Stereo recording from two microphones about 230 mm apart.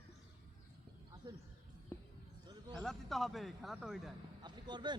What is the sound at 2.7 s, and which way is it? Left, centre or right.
Speech, centre.